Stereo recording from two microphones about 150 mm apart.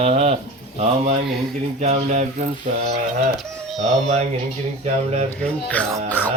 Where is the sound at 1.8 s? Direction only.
50° right (ahead or behind).